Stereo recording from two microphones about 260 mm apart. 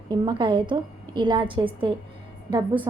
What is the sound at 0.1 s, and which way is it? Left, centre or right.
A woman's voice, centre.